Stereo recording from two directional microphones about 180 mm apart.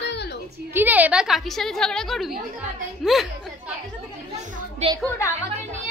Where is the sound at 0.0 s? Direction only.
70° left (ahead or behind).